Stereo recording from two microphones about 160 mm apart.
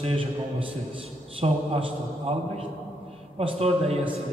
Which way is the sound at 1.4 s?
40° right (ahead or behind).